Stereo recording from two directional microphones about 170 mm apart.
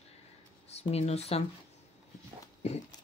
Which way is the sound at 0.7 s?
40° left (ahead or behind).